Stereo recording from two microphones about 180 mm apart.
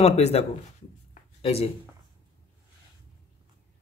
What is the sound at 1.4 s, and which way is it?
Speech, 35° left (ahead or behind).